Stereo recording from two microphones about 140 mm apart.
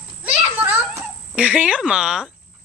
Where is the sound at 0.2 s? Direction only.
10° right (ahead or behind).